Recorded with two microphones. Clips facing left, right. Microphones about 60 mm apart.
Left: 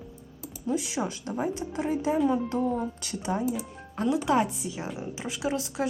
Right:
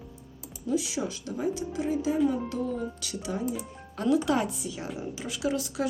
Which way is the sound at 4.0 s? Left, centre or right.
Left.